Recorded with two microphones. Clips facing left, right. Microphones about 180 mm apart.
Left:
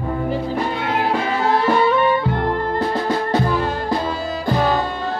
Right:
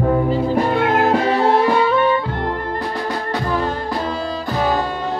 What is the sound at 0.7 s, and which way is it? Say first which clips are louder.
Music: right 5 dB; 50° right (ahead or behind).